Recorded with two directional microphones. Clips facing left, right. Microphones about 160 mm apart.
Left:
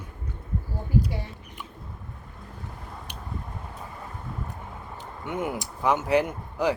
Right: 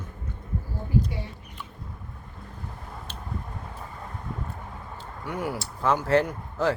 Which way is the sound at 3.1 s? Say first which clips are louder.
Right 1 dB; 15° left (ahead or behind).